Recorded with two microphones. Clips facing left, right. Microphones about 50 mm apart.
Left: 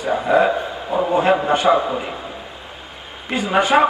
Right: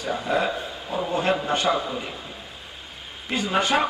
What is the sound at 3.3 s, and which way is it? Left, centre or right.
Speech, centre.